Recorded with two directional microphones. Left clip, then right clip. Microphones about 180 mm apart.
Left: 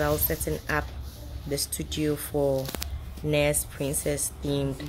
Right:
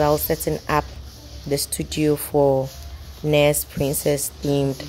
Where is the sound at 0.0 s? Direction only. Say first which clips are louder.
Right 8 dB; 30° right (ahead or behind).